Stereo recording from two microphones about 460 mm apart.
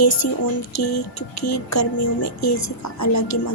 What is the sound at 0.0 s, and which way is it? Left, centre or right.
Speech, left.